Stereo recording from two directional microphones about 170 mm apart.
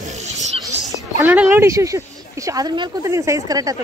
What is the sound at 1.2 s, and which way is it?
Speech, 10° right (ahead or behind).